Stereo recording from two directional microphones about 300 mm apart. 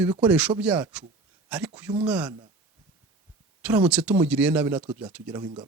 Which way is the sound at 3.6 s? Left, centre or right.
Centre.